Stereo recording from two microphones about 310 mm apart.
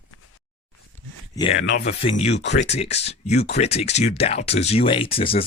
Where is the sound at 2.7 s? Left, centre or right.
Centre.